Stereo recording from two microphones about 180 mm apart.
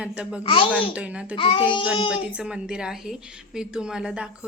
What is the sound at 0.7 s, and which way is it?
Speech, 5° right (ahead or behind).